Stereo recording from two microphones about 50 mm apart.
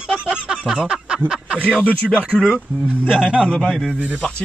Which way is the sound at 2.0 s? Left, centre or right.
Centre.